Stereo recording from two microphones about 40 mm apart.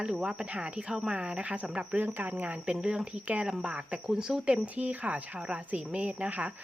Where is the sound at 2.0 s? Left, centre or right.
Right.